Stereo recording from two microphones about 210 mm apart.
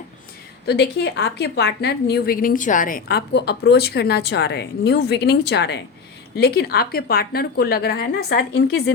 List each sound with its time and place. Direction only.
0.7 s a woman's voice: 50° left (ahead or behind)